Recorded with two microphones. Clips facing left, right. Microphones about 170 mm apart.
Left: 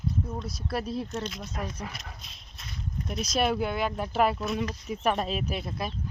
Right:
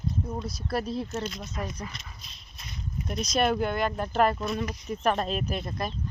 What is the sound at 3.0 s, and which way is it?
Speech, 5° left (ahead or behind).